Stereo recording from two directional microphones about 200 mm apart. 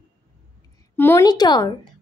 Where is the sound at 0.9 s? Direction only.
10° left (ahead or behind).